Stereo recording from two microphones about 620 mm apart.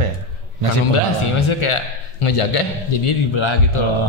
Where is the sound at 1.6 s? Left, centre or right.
Left.